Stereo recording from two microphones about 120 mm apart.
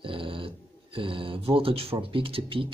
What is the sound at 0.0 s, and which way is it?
Dog, 45° right (ahead or behind).